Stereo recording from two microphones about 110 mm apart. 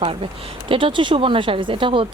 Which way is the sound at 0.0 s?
55° right (ahead or behind).